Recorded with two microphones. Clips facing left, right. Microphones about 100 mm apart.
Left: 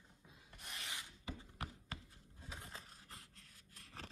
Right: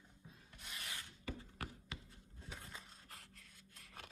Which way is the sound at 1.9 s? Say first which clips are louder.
Left 1 dB; 40° left (ahead or behind).